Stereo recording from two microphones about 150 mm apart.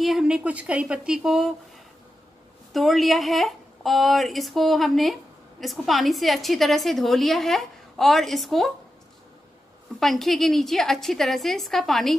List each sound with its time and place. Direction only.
0.0 s a woman's voice: 5° right (ahead or behind)
2.7 s a woman's voice: centre (ahead or behind)
9.9 s a woman's voice: centre (ahead or behind)